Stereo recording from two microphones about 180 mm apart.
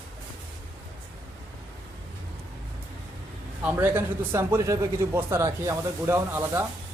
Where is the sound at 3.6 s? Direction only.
10° right (ahead or behind).